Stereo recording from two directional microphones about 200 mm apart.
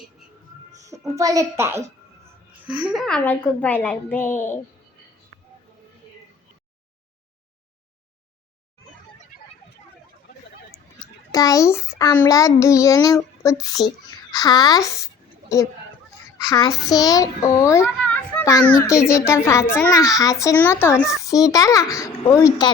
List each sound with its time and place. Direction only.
0.8 s a child's voice: 15° right (ahead or behind)
2.8 s a child's voice: centre (ahead or behind)
11.3 s a child's voice: 15° left (ahead or behind)